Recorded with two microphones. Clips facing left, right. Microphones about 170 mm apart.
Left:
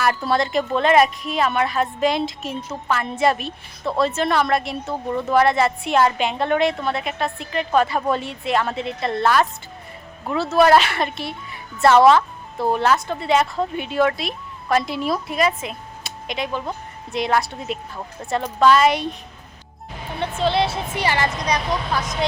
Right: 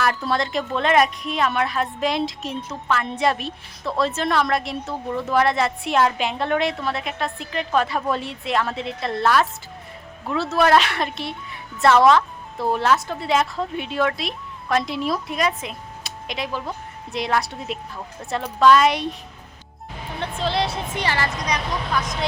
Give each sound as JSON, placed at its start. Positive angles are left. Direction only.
{"t": 0.0, "sound": "a woman's voice", "side_deg": 0}
{"t": 20.1, "sound": "a woman's voice", "side_deg": 0}
{"t": 21.4, "sound": "speech", "side_deg": 35}